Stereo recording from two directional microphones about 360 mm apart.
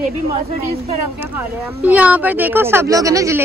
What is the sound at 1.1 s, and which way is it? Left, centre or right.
Speech, centre.